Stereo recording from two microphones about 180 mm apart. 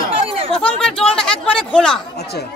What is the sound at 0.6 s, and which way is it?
Speech, 5° left (ahead or behind).